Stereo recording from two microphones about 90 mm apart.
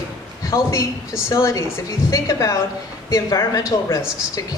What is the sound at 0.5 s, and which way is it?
Speech, 35° left (ahead or behind).